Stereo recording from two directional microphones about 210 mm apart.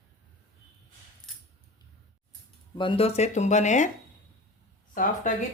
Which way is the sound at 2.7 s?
25° left (ahead or behind).